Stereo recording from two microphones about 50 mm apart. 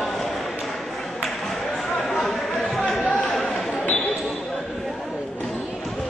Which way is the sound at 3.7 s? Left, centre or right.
Left.